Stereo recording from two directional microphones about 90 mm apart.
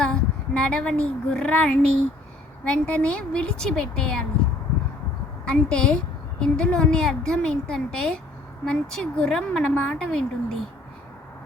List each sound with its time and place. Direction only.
0.0 s a woman's voice: 10° left (ahead or behind)
5.5 s a woman's voice: 10° left (ahead or behind)